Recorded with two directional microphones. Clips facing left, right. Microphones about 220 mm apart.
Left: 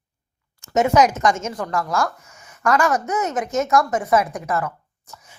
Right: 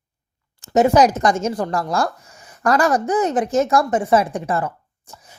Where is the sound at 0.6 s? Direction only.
35° right (ahead or behind).